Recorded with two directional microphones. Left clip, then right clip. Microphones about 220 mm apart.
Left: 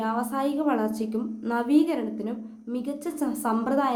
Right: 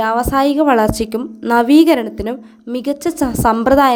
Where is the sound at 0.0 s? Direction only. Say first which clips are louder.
Right 13 dB; 40° right (ahead or behind).